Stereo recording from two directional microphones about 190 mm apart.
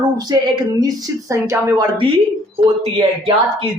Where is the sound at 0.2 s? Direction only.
20° right (ahead or behind).